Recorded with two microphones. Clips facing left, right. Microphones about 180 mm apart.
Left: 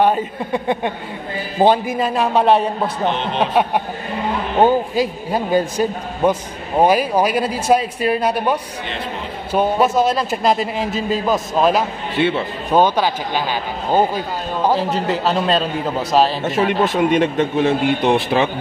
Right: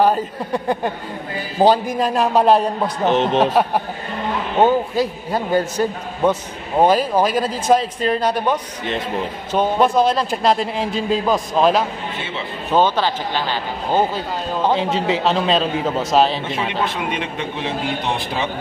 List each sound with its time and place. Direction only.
0.0 s speech: 5° left (ahead or behind)
3.1 s a man's voice: 40° right (ahead or behind)
4.6 s a man's voice: 15° left (ahead or behind)
12.2 s speech: 60° left (ahead or behind)
12.7 s speech: 10° left (ahead or behind)
16.4 s a man's voice: 45° left (ahead or behind)